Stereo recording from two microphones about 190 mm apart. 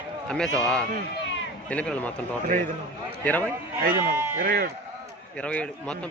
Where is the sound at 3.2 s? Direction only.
10° left (ahead or behind).